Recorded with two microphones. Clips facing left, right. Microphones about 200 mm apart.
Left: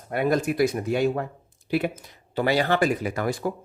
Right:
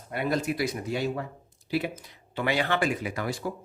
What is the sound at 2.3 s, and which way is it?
Speech, 40° left (ahead or behind).